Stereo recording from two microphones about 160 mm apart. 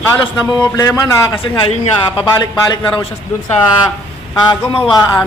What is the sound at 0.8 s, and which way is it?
Speech, 20° left (ahead or behind).